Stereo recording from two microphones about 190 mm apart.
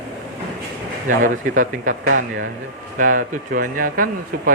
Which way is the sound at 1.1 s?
45° right (ahead or behind).